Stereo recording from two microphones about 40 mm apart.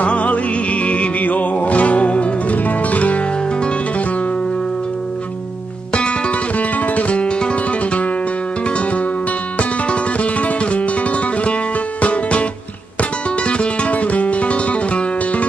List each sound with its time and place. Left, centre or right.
0.0 s music: left
5.9 s music: left
9.6 s music: left